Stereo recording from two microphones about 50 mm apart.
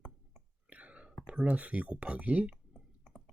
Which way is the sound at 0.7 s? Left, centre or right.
Right.